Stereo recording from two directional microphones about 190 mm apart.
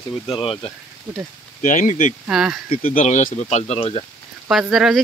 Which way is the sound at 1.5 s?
40° left (ahead or behind).